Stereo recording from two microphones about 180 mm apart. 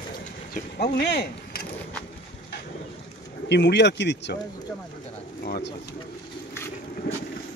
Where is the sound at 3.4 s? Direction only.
75° left (ahead or behind).